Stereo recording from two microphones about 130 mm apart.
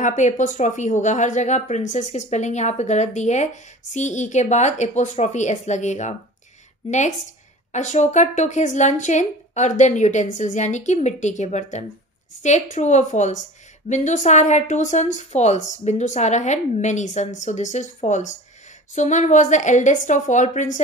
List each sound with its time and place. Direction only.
0.0 s a woman's voice: 70° left (ahead or behind)